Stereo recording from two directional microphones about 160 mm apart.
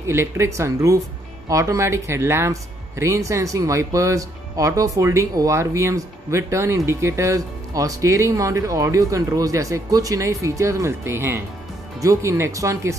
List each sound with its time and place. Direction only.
0.0 s speech: 15° right (ahead or behind)